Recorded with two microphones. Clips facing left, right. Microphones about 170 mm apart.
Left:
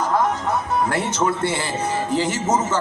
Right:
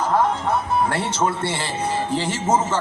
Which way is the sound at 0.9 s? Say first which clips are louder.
Left 1 dB; 30° right (ahead or behind).